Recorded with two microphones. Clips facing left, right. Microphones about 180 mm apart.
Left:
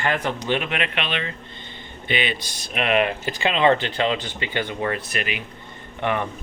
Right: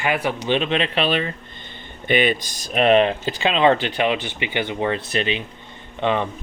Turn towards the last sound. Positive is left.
turn(degrees=-20)  # may be behind; listen again after turning